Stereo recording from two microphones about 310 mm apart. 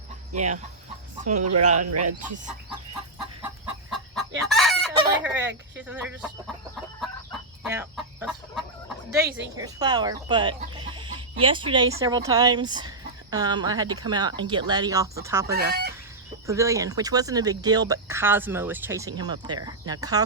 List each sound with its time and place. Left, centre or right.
0.3 s chicken: right
1.5 s speech: right
3.4 s chicken: centre
4.9 s chicken: centre
5.9 s speech: centre
7.6 s chicken: centre
9.2 s a woman's voice: right
9.6 s speech: centre
15.5 s speech: right
16.5 s speech: centre